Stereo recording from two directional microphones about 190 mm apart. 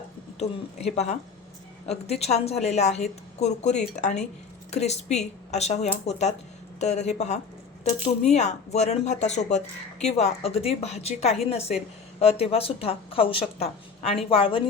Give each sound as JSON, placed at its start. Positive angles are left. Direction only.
{"t": 0.3, "sound": "a woman's voice", "side_deg": 35}